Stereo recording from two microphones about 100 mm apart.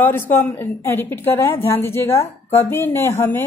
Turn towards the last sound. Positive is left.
turn(degrees=25)  # may be behind; listen again after turning